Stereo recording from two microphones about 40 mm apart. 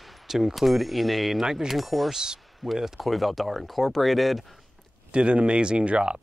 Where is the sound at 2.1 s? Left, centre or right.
Centre.